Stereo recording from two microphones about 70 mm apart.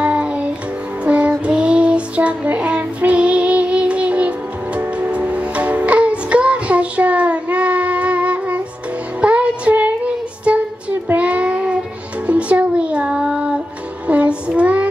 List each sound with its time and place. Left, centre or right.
0.0 s music: centre
1.4 s child singing: centre
4.7 s music: centre
14.0 s child singing: centre